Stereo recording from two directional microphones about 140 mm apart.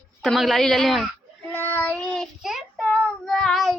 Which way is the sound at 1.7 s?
10° left (ahead or behind).